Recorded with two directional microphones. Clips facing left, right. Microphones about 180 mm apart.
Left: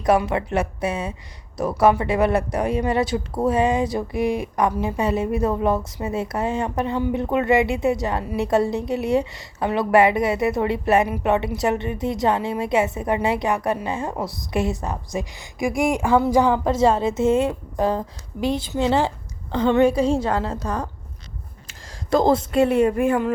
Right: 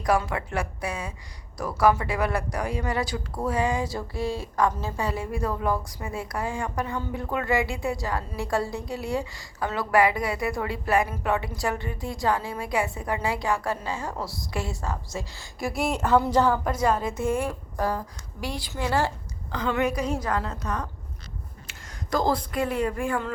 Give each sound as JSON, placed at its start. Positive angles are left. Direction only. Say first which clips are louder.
{"t": 0.0, "sound": "a woman's voice", "louder": "left 6 dB", "side_deg": 20}
{"t": 16.6, "sound": "speech", "louder": "left 6 dB", "side_deg": 25}
{"t": 22.1, "sound": "speech", "louder": "left 7 dB", "side_deg": 25}